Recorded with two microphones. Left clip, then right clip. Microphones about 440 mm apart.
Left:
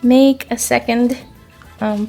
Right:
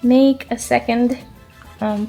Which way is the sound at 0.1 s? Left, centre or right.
Centre.